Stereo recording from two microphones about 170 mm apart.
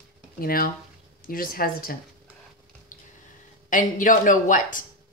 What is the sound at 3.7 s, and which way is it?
A woman's voice, 50° left (ahead or behind).